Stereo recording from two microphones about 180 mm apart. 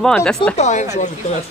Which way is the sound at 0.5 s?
40° left (ahead or behind).